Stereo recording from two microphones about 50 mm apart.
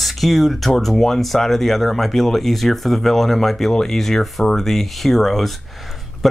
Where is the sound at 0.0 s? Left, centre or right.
Centre.